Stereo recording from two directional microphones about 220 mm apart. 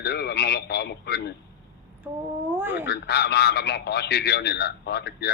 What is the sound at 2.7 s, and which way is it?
A man's voice, 50° left (ahead or behind).